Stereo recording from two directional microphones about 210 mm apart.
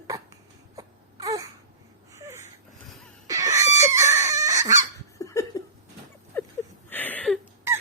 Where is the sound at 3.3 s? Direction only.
15° right (ahead or behind).